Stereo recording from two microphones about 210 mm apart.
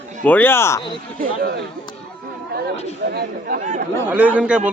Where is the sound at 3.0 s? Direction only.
45° right (ahead or behind).